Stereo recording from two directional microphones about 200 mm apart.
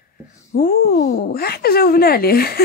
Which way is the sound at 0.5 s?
45° left (ahead or behind).